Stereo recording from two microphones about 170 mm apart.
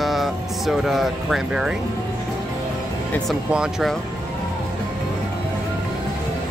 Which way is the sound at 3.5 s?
5° right (ahead or behind).